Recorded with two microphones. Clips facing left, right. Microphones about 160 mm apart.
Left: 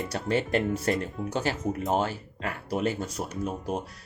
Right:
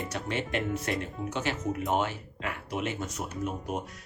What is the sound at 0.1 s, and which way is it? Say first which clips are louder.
Speech: left 9 dB; 35° left (ahead or behind).